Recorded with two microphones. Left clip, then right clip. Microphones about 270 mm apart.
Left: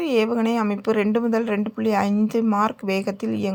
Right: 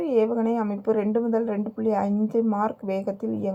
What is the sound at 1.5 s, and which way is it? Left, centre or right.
Speech, left.